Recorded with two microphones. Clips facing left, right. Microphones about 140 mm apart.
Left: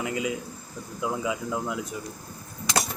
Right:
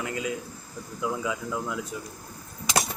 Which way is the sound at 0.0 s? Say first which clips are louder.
Left 2 dB; 15° left (ahead or behind).